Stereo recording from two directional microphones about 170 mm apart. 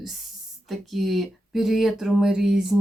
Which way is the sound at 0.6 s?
Centre (ahead or behind).